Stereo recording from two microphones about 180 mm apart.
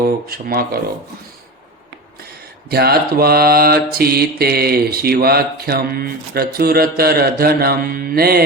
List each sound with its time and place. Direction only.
0.0 s mantra: 55° right (ahead or behind)
2.6 s mantra: 60° right (ahead or behind)